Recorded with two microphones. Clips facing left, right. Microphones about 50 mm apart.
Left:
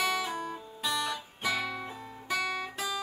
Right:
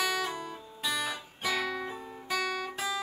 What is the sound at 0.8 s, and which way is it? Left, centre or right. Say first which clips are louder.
Music: left 1 dB; centre.